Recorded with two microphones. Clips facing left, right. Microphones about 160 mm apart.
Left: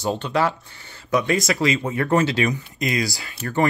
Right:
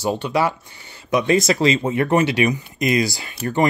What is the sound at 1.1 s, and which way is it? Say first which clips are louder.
Speech: right 3 dB; 25° right (ahead or behind).